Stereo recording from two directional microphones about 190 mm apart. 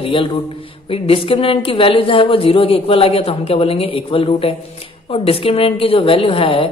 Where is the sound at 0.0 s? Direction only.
25° left (ahead or behind).